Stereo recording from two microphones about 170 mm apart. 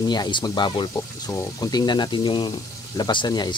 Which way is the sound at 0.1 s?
25° left (ahead or behind).